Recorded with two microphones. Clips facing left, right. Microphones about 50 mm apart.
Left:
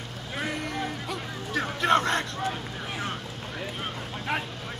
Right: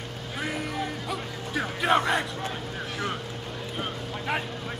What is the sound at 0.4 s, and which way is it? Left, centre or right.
Music, centre.